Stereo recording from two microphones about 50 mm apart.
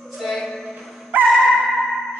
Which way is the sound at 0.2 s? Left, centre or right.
Centre.